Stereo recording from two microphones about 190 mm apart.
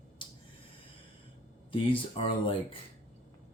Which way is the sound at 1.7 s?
30° left (ahead or behind).